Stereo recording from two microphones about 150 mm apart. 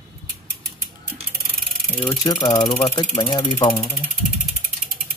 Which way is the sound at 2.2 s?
25° left (ahead or behind).